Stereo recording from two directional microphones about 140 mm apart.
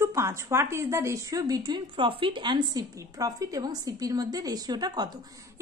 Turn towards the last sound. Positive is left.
turn(degrees=-30)  # may be behind; listen again after turning